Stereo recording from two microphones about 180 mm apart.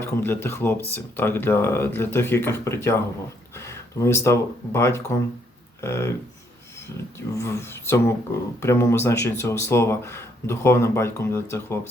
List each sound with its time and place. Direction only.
0.0 s speech: 10° left (ahead or behind)
7.3 s speech: 15° left (ahead or behind)